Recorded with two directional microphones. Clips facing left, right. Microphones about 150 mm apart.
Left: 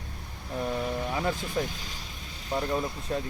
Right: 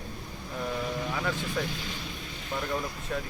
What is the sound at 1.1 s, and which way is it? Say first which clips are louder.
Speech: left 2 dB; 30° left (ahead or behind).